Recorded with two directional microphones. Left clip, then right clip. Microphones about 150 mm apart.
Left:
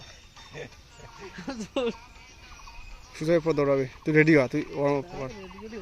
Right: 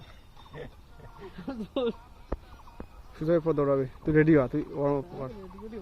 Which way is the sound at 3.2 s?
20° left (ahead or behind).